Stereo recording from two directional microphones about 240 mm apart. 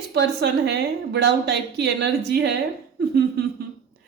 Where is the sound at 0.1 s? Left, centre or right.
Right.